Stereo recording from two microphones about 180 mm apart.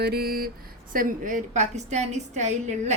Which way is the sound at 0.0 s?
60° right (ahead or behind).